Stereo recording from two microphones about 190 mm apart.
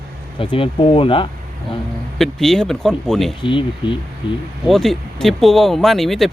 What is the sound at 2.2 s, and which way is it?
Speech, centre (ahead or behind).